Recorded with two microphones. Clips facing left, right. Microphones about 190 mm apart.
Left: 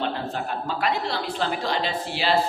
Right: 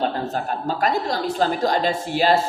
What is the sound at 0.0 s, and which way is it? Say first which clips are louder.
A woman's voice: right 4 dB; 40° right (ahead or behind).